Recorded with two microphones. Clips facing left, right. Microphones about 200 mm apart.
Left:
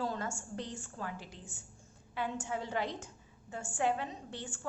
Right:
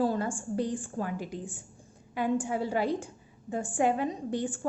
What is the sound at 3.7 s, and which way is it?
Speech, 15° right (ahead or behind).